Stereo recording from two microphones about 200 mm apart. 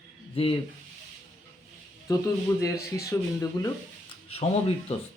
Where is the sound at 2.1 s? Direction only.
20° left (ahead or behind).